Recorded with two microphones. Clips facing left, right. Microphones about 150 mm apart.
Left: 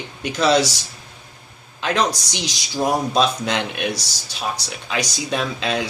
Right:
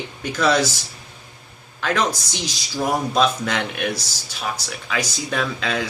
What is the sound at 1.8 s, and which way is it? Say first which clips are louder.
Speech: left 1 dB; 20° left (ahead or behind).